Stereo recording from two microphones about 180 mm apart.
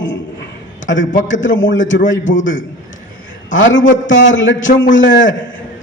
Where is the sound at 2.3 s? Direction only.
45° left (ahead or behind).